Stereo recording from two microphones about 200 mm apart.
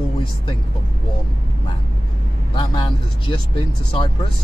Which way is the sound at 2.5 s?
25° left (ahead or behind).